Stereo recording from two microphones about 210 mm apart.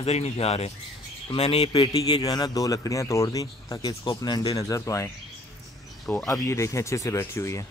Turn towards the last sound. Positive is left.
turn(degrees=15)  # may be behind; listen again after turning